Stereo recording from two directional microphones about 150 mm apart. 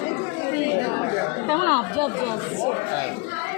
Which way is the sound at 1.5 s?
35° right (ahead or behind).